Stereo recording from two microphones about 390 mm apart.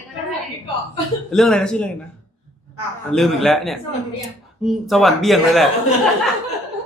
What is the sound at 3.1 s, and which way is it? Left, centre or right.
A man's voice, centre.